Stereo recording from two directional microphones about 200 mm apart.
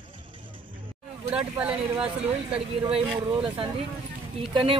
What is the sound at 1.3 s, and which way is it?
Speech, 5° right (ahead or behind).